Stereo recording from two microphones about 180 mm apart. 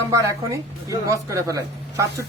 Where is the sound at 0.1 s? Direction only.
15° right (ahead or behind).